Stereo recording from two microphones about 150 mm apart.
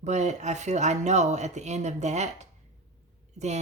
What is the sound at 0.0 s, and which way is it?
Speech, 50° right (ahead or behind).